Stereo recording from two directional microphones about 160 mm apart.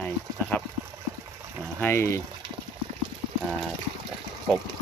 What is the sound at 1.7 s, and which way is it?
Speech, 15° left (ahead or behind).